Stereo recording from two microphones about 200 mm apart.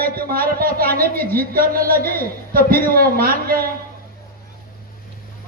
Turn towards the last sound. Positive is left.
turn(degrees=-50)  # may be behind; listen again after turning